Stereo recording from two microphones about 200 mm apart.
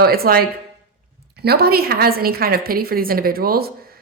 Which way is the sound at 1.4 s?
50° right (ahead or behind).